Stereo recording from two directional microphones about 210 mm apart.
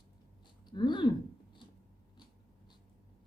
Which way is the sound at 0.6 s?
20° left (ahead or behind).